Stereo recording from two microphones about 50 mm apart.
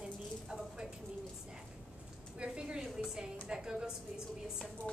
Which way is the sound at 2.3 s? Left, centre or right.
Centre.